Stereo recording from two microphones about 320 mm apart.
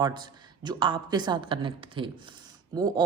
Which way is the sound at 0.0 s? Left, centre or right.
Centre.